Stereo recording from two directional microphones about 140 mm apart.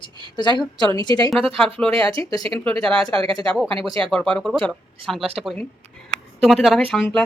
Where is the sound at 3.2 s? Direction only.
40° right (ahead or behind).